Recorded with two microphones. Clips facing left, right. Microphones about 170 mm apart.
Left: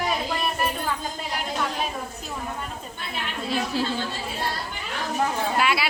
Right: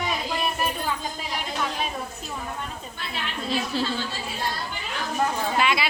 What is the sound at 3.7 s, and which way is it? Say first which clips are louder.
Speech: left 1 dB; 10° left (ahead or behind).